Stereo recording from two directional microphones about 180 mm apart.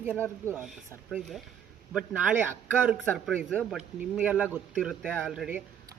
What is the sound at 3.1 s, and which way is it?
Speech, 5° left (ahead or behind).